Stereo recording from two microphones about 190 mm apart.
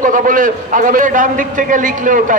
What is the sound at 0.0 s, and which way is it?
A man's voice, 45° right (ahead or behind).